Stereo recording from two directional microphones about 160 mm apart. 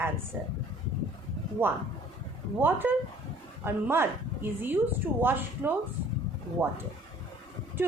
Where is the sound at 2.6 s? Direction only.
10° right (ahead or behind).